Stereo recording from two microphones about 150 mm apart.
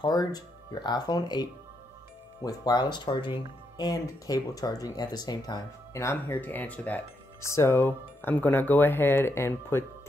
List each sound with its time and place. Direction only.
0.0 s speech: 25° left (ahead or behind)